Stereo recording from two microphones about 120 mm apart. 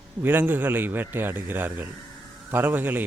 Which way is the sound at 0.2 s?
15° right (ahead or behind).